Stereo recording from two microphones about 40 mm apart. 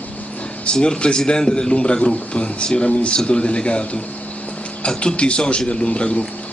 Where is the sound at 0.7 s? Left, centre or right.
Left.